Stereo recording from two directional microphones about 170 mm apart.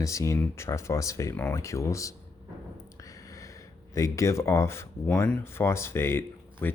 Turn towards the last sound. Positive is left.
turn(degrees=15)  # may be behind; listen again after turning